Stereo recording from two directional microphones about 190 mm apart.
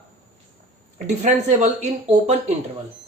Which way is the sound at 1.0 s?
40° right (ahead or behind).